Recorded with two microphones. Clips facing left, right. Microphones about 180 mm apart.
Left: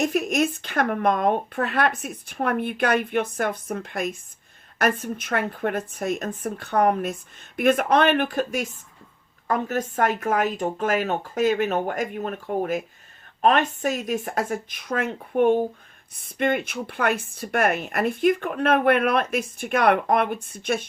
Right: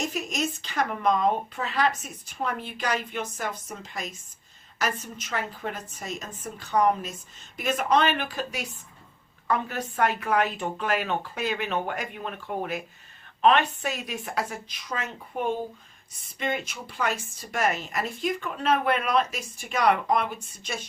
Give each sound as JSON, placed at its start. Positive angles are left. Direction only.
{"t": 0.0, "sound": "speech", "side_deg": 60}